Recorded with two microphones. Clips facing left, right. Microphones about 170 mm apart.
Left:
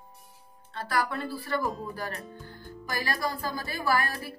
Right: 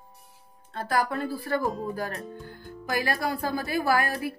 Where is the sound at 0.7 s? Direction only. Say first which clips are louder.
Right 3 dB; 45° right (ahead or behind).